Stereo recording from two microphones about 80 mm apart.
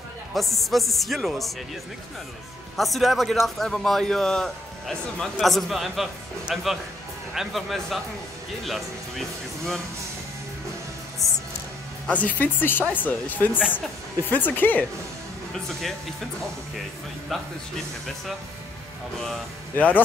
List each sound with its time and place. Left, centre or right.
0.3 s a man's voice: centre
2.8 s a man's voice: centre
11.2 s music: centre
12.1 s speech: centre
17.3 s a man's voice: centre